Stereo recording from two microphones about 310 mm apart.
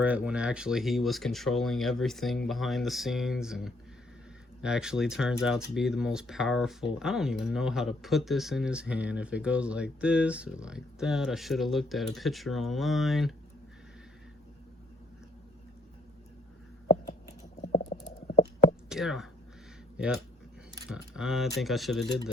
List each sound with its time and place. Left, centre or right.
0.0 s speech: centre
17.2 s a sound: centre
18.9 s speech: centre
20.9 s speech: centre